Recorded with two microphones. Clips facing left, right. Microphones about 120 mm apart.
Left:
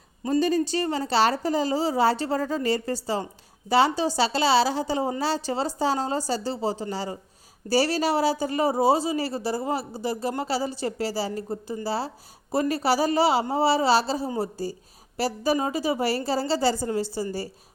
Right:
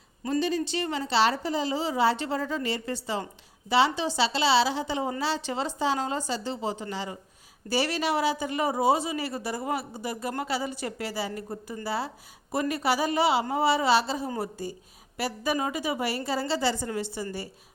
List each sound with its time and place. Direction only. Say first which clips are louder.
0.3 s a woman's voice: left 4 dB; 45° left (ahead or behind)